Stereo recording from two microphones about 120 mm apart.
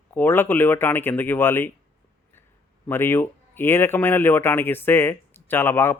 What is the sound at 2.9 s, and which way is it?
Speech, 20° left (ahead or behind).